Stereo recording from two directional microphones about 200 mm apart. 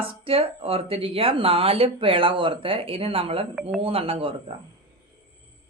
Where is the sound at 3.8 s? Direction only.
30° right (ahead or behind).